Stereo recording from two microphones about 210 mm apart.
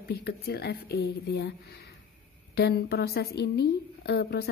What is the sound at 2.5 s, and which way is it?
A woman's voice, 50° left (ahead or behind).